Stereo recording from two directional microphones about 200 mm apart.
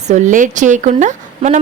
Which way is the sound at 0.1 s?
40° right (ahead or behind).